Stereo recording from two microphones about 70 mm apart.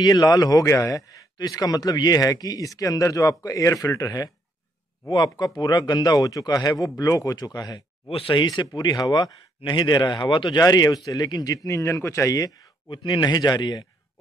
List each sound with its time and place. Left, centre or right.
0.0 s speech: left
0.7 s speech: left
5.1 s speech: left
8.4 s a man's voice: left
13.0 s speech: left